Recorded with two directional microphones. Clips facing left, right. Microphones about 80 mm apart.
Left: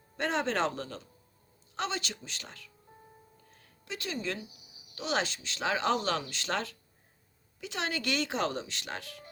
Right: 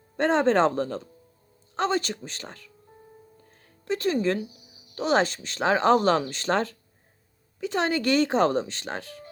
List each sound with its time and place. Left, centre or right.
0.2 s speech: right
3.8 s speech: right